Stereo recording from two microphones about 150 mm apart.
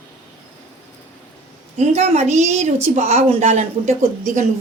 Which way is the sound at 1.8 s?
45° right (ahead or behind).